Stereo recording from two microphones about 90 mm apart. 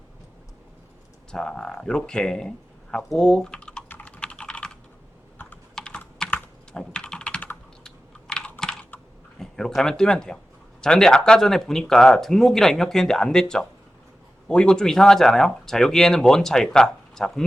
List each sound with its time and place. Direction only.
1.3 s speech: 5° left (ahead or behind)
3.8 s typing: 20° left (ahead or behind)
5.4 s typing: 25° left (ahead or behind)
5.7 s typing: 10° left (ahead or behind)
6.7 s computer keyboard: 10° left (ahead or behind)
9.4 s a sound: 5° left (ahead or behind)
10.8 s speech: 10° left (ahead or behind)